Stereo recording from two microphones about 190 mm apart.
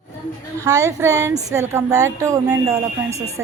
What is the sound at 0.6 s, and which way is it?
A woman's voice, 15° right (ahead or behind).